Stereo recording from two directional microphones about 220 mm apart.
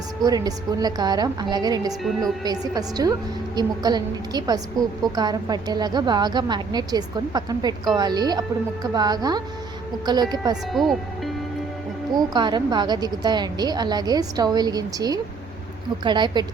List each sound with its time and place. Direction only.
0.2 s a woman's voice: 15° right (ahead or behind)
10.7 s speech: centre (ahead or behind)
12.1 s a woman's voice: 20° right (ahead or behind)